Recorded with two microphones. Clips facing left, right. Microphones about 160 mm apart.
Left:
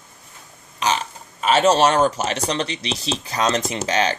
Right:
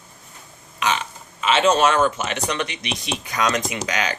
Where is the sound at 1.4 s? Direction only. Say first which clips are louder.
Left 2 dB; 40° left (ahead or behind).